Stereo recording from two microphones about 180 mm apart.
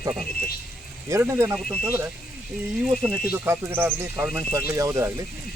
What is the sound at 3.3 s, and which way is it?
Speech, 10° right (ahead or behind).